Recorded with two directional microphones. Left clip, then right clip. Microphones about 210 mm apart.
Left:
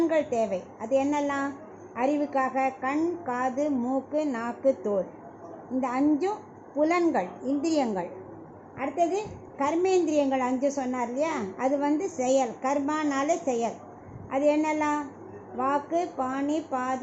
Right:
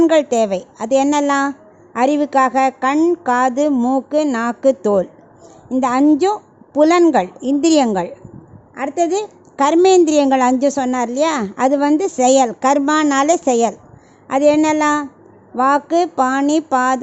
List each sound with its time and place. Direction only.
0.0 s a woman's voice: 45° right (ahead or behind)